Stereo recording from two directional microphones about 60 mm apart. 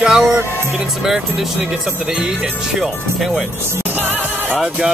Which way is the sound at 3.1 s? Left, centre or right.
Centre.